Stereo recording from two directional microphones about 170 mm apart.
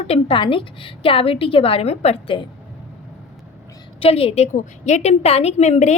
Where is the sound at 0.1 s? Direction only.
30° left (ahead or behind).